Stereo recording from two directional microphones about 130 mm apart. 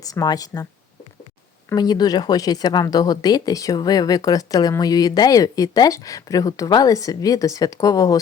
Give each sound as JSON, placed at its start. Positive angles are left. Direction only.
{"t": 0.0, "sound": "speech", "side_deg": 30}
{"t": 1.7, "sound": "speech", "side_deg": 30}